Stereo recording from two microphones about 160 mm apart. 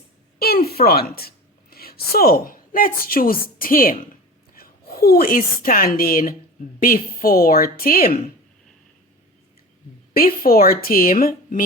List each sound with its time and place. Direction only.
0.3 s a sound: 70° left (ahead or behind)
0.8 s a woman's voice: 70° left (ahead or behind)
10.2 s speech: 65° left (ahead or behind)